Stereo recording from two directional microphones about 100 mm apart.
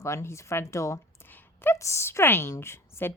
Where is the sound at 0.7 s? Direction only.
30° left (ahead or behind).